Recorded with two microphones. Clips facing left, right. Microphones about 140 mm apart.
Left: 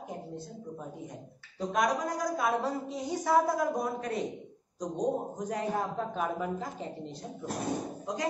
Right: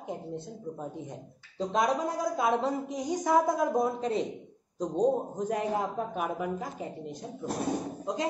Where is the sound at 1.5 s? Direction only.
25° right (ahead or behind).